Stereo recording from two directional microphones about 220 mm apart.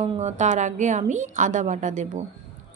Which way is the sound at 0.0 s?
30° right (ahead or behind).